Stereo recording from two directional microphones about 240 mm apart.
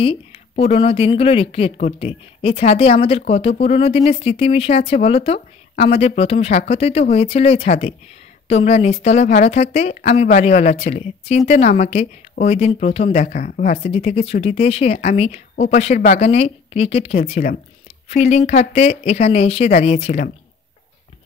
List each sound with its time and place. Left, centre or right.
0.7 s speech: left